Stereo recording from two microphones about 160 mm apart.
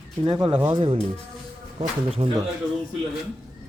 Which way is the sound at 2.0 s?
40° right (ahead or behind).